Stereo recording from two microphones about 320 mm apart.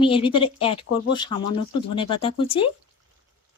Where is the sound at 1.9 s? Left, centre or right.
Centre.